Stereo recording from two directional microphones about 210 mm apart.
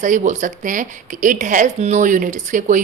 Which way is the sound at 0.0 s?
35° right (ahead or behind).